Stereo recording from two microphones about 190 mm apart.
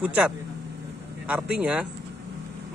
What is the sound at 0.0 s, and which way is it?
Speech, 10° right (ahead or behind).